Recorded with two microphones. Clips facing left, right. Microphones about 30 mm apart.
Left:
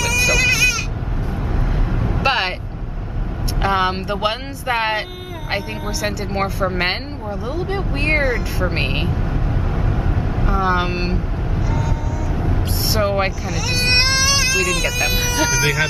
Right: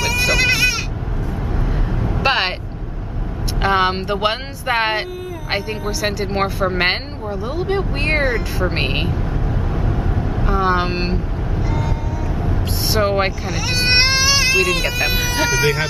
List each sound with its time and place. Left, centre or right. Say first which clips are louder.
0.0 s goat: even; right
1.7 s vehicle: even; centre
2.2 s vehicle: right 1 dB; centre
3.6 s speech: right 2 dB; centre
6.2 s speech: right 2 dB; centre
9.1 s vehicle: even; centre
10.5 s speech: right 1 dB; centre
11.6 s vehicle: even; right
12.4 s speech: even; centre
13.9 s baby cry: right 2 dB; centre
15.2 s speech: right 2 dB; centre